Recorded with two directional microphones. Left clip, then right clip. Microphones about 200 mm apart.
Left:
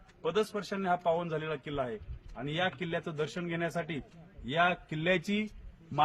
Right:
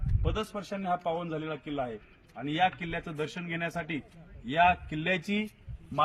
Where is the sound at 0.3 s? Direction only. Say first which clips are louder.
Left 5 dB; 15° left (ahead or behind).